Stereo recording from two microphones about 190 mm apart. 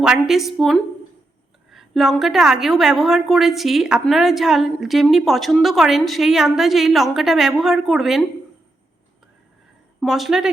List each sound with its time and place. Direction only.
0.0 s a woman's voice: centre (ahead or behind)
10.0 s a woman's voice: centre (ahead or behind)